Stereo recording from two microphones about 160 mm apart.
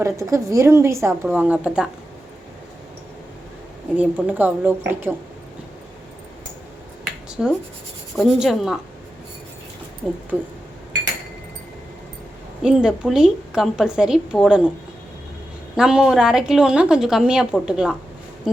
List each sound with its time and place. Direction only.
0.0 s a woman's voice: 20° right (ahead or behind)
3.9 s a woman's voice: 10° right (ahead or behind)
7.3 s writing: 5° right (ahead or behind)
8.1 s a woman's voice: centre (ahead or behind)
10.0 s a woman's voice: centre (ahead or behind)
12.6 s a woman's voice: 5° right (ahead or behind)
15.7 s a woman's voice: 5° right (ahead or behind)